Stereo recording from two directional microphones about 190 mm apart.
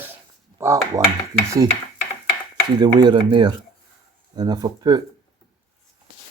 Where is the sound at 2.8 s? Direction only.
25° right (ahead or behind).